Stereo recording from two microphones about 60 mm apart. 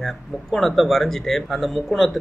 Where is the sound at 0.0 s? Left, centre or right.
Centre.